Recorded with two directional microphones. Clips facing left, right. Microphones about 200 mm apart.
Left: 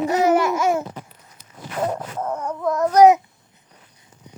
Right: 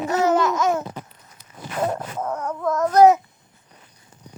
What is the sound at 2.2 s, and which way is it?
Babbling, 10° left (ahead or behind).